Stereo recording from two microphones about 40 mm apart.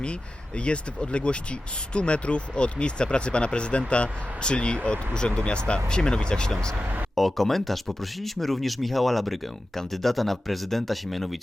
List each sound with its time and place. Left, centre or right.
0.0 s speech: left
7.2 s speech: centre